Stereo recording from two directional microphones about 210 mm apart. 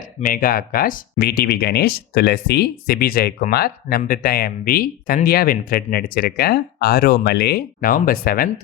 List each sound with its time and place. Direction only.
0.3 s speech: 40° left (ahead or behind)